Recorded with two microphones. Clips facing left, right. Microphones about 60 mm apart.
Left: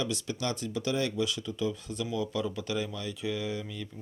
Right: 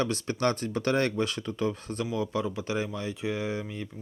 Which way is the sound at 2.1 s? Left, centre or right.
Right.